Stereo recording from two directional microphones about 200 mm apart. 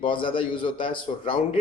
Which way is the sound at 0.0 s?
25° left (ahead or behind).